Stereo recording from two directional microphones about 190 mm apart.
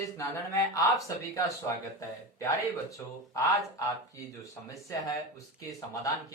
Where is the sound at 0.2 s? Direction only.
15° left (ahead or behind).